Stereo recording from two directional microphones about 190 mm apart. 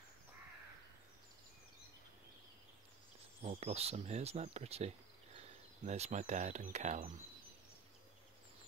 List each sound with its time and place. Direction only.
3.4 s speech: 35° right (ahead or behind)